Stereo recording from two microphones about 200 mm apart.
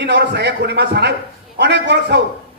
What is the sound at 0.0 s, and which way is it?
A man's voice, 60° right (ahead or behind).